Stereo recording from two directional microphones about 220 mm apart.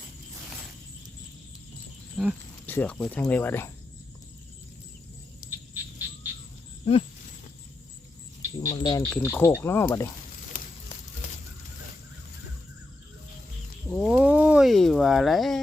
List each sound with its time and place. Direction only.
2.2 s speech: centre (ahead or behind)
8.7 s speech: 20° left (ahead or behind)
9.0 s speech: 10° left (ahead or behind)
13.9 s speech: 5° right (ahead or behind)